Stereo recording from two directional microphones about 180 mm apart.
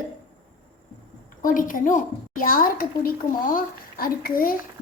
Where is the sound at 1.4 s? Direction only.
50° left (ahead or behind).